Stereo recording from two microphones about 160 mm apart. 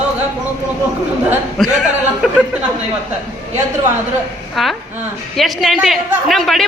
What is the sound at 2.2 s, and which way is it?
Speech, 5° right (ahead or behind).